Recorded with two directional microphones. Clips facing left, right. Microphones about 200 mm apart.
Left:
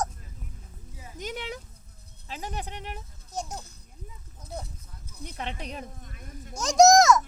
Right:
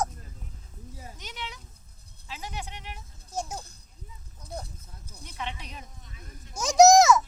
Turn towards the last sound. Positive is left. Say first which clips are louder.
# right 1 dB
turn(degrees=-5)  # may be behind; listen again after turning